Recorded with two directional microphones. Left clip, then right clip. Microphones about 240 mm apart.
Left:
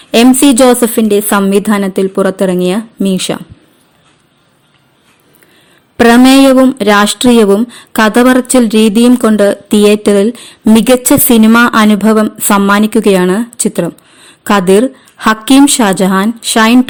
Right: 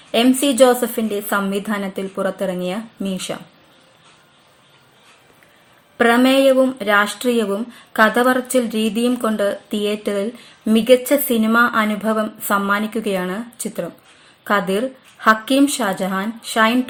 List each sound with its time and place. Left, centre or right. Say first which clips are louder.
0.1 s speech: left 10 dB; left
6.0 s speech: left 9 dB; left